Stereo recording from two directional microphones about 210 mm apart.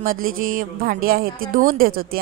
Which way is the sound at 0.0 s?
40° right (ahead or behind).